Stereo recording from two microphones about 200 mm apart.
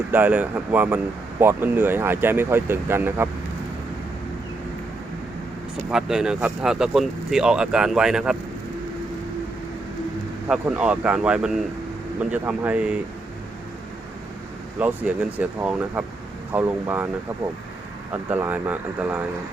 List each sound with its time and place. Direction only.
0.1 s speech: 10° right (ahead or behind)
5.9 s speech: 5° right (ahead or behind)
10.5 s speech: 5° right (ahead or behind)
14.8 s speech: 5° right (ahead or behind)
18.3 s speech: 10° right (ahead or behind)